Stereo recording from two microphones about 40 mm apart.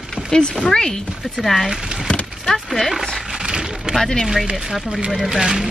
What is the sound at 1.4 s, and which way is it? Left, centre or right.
Speech, centre.